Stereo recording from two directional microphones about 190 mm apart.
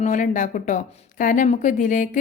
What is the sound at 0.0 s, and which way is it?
A woman's voice, 40° left (ahead or behind).